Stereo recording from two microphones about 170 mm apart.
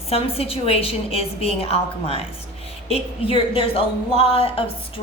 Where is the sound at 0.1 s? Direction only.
35° left (ahead or behind).